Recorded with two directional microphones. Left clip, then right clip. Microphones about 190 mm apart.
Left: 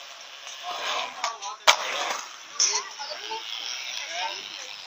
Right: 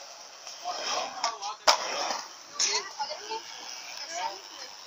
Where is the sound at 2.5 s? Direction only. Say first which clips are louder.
Left 3 dB; 50° right (ahead or behind).